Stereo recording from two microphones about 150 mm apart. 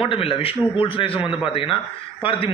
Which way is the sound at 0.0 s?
35° left (ahead or behind).